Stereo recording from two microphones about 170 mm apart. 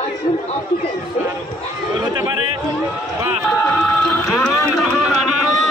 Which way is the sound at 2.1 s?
25° right (ahead or behind).